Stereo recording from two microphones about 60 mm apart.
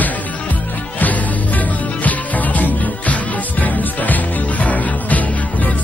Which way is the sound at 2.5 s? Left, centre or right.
Left.